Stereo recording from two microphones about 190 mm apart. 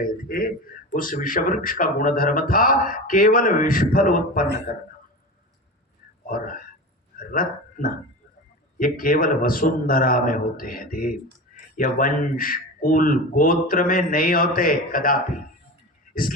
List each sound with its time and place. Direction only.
0.0 s a man's voice: 45° left (ahead or behind)
6.2 s a man's voice: 50° left (ahead or behind)